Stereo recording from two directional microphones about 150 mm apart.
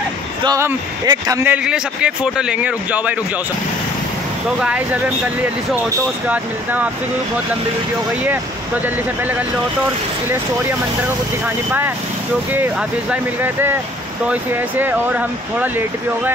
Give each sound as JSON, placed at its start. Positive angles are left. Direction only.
{"t": 1.0, "sound": "a man's voice", "side_deg": -25}
{"t": 1.4, "sound": "a man's voice", "side_deg": -10}
{"t": 4.6, "sound": "a man's voice", "side_deg": -5}
{"t": 6.2, "sound": "a man's voice", "side_deg": -10}
{"t": 13.1, "sound": "a man's voice", "side_deg": -15}